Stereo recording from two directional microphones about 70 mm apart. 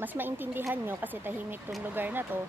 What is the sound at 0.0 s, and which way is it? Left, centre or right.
Speech, right.